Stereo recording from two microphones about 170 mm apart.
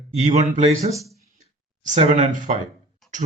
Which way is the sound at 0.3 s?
40° right (ahead or behind).